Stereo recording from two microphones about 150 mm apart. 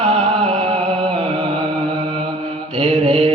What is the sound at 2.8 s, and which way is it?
Mantra, 40° right (ahead or behind).